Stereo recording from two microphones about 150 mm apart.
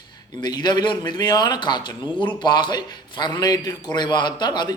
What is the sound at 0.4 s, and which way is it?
A man's voice, 30° left (ahead or behind).